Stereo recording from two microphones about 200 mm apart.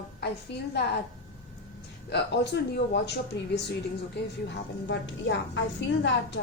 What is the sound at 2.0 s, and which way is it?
Speech, 55° left (ahead or behind).